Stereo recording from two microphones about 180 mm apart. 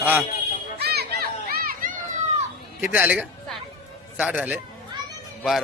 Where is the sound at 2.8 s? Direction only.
10° right (ahead or behind).